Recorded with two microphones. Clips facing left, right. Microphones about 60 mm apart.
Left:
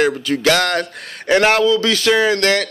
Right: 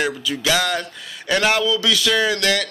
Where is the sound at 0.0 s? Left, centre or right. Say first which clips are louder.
Left 6 dB; left.